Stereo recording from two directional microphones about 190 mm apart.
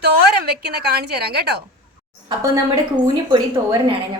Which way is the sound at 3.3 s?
20° right (ahead or behind).